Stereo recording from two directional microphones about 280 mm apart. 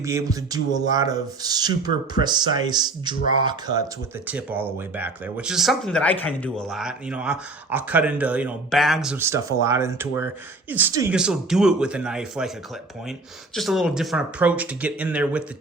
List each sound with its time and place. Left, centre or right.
0.0 s speech: centre
13.6 s speech: centre